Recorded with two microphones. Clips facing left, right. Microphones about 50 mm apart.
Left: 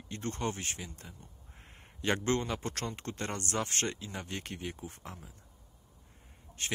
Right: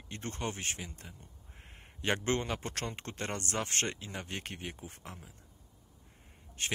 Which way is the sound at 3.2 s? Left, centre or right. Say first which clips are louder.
Left 1 dB; centre.